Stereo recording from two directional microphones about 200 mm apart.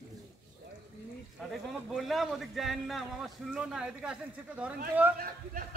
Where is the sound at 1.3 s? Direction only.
Centre (ahead or behind).